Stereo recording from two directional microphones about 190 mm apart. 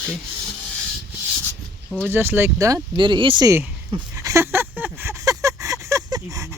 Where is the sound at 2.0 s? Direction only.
10° right (ahead or behind).